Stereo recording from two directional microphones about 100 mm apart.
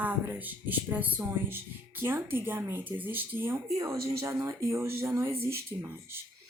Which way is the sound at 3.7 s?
35° right (ahead or behind).